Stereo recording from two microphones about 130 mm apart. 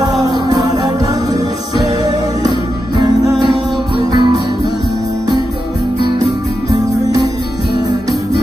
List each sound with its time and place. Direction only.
0.2 s music: 30° right (ahead or behind)
4.1 s music: 30° right (ahead or behind)